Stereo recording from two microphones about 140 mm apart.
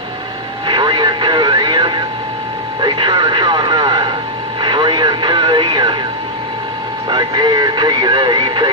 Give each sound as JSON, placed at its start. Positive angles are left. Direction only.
{"t": 0.7, "sound": "vehicle", "side_deg": -35}
{"t": 2.8, "sound": "radio", "side_deg": -30}
{"t": 7.1, "sound": "speech", "side_deg": -30}